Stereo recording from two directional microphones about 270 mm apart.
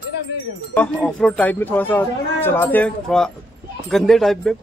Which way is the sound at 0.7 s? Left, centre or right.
Centre.